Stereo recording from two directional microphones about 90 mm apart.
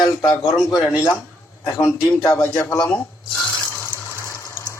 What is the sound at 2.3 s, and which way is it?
A man's voice, 10° left (ahead or behind).